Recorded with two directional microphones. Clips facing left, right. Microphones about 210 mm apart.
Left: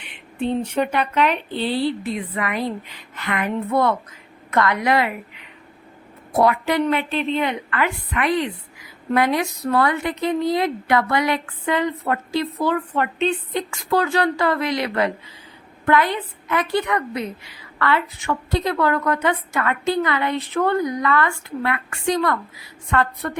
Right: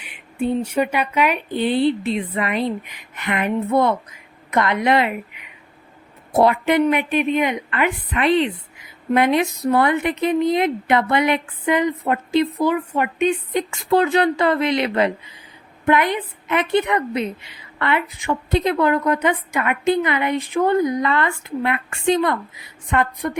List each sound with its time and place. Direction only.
0.0 s a woman's voice: 10° right (ahead or behind)